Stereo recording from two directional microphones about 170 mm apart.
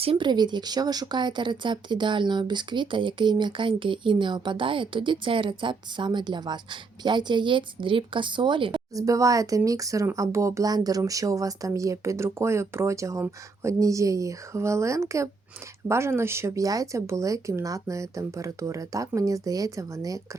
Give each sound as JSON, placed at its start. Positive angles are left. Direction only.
{"t": 0.0, "sound": "speech", "side_deg": -30}